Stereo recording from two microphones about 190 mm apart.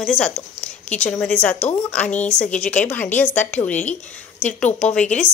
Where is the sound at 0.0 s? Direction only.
Centre (ahead or behind).